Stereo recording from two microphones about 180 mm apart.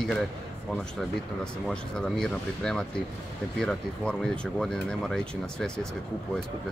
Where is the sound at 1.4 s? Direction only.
5° left (ahead or behind).